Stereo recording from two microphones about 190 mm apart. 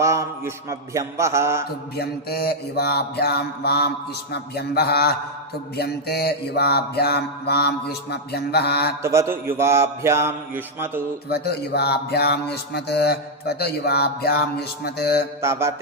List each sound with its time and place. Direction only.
0.0 s mantra: 15° right (ahead or behind)
2.0 s music: 55° left (ahead or behind)
9.0 s mantra: 15° right (ahead or behind)
11.3 s music: 60° left (ahead or behind)
15.4 s mantra: 15° right (ahead or behind)